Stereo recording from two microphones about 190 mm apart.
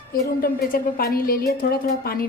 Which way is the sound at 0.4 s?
50° left (ahead or behind).